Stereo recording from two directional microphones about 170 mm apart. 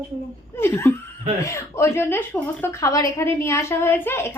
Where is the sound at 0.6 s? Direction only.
15° left (ahead or behind).